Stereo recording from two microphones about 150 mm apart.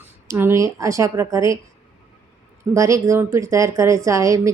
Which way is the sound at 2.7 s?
20° right (ahead or behind).